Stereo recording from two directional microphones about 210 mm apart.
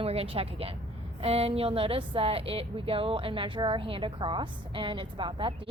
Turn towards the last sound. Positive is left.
turn(degrees=-25)  # may be behind; listen again after turning